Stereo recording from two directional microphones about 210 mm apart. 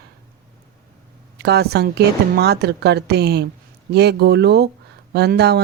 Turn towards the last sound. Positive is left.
turn(degrees=-50)  # may be behind; listen again after turning